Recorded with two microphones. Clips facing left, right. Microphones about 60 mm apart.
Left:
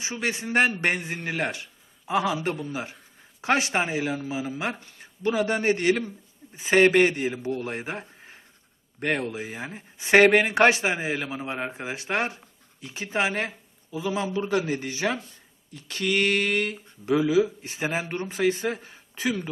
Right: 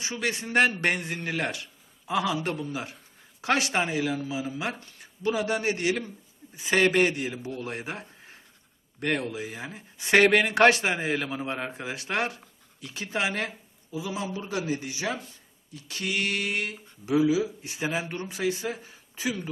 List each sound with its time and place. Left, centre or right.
0.0 s speech: left
6.6 s speech: left
13.9 s speech: left